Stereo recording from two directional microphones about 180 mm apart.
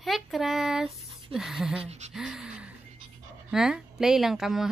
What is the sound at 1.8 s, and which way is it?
Gasp, 40° right (ahead or behind).